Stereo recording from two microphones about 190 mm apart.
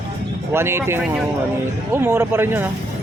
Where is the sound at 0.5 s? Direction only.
15° right (ahead or behind).